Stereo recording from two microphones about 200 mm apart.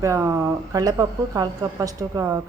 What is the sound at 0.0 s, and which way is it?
A woman's voice, 15° right (ahead or behind).